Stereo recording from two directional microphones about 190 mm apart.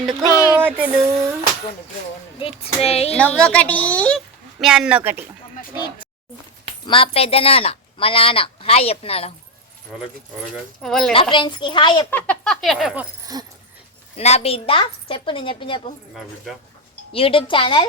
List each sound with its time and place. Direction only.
0.3 s a sound: 20° left (ahead or behind)
0.6 s a sound: 10° right (ahead or behind)
2.4 s a woman's voice: 30° left (ahead or behind)
3.2 s a woman's voice: 5° left (ahead or behind)
4.6 s speech: 5° right (ahead or behind)
5.7 s a woman's voice: 25° left (ahead or behind)
10.8 s speech: 5° left (ahead or behind)
11.1 s a woman's voice: 25° left (ahead or behind)
12.1 s speech: 5° left (ahead or behind)
13.3 s dog: 20° right (ahead or behind)
14.2 s a woman's voice: 35° left (ahead or behind)
17.1 s a woman's voice: 30° left (ahead or behind)